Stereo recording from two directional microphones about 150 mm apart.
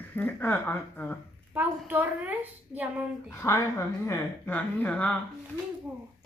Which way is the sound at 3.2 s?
20° left (ahead or behind).